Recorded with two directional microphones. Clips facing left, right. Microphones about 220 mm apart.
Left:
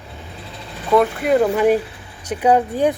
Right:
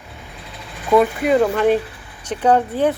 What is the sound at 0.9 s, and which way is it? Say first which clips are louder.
Speech: right 1 dB; centre (ahead or behind).